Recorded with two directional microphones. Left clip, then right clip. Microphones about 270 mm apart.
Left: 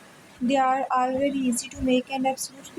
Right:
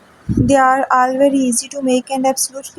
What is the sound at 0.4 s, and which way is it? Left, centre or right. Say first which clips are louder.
A woman's voice: right 10 dB; right.